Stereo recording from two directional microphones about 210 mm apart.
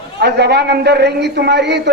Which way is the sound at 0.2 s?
50° right (ahead or behind).